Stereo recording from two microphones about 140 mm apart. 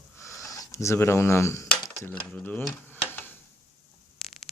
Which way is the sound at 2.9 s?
15° left (ahead or behind).